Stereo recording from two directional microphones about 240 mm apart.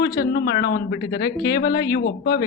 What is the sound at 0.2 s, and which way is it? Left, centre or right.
A woman's voice, left.